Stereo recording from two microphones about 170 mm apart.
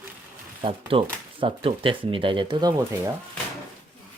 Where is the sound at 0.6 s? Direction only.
30° right (ahead or behind).